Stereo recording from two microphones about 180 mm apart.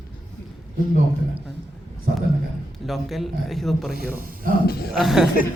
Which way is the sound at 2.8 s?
Centre (ahead or behind).